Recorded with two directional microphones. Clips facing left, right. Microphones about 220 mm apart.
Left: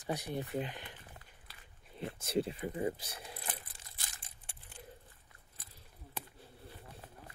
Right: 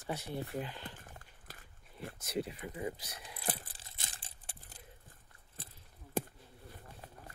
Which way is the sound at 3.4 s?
30° right (ahead or behind).